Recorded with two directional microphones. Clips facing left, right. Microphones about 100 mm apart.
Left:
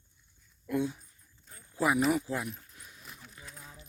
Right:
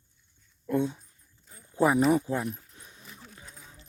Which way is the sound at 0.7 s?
25° right (ahead or behind).